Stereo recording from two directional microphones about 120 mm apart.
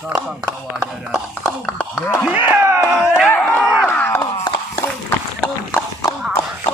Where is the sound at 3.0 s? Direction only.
5° left (ahead or behind).